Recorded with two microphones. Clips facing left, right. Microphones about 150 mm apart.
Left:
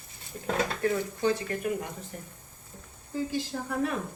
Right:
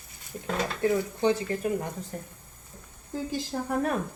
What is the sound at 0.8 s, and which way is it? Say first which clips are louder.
Speech: right 3 dB; 25° right (ahead or behind).